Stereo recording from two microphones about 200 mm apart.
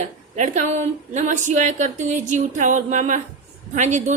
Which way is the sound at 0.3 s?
40° right (ahead or behind).